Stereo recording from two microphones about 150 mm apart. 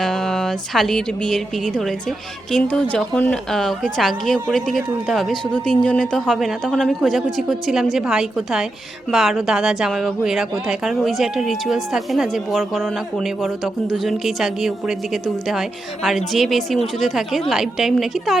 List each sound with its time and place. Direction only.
0.0 s a woman's voice: centre (ahead or behind)